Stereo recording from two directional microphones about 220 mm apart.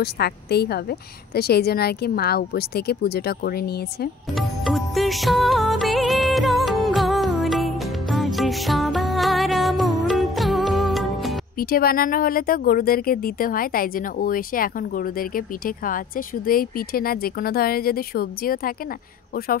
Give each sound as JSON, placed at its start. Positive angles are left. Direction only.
{"t": 0.0, "sound": "a woman's voice", "side_deg": 45}
{"t": 4.4, "sound": "music", "side_deg": 0}
{"t": 11.5, "sound": "speech", "side_deg": 45}